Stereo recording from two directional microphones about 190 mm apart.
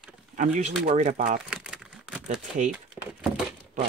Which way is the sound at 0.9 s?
40° right (ahead or behind).